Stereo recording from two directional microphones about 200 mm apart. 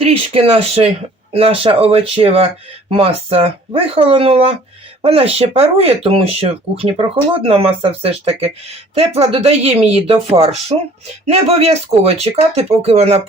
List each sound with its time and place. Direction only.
0.0 s speech: 30° right (ahead or behind)